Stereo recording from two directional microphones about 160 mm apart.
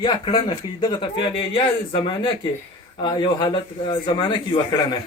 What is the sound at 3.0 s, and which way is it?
Speech, 30° left (ahead or behind).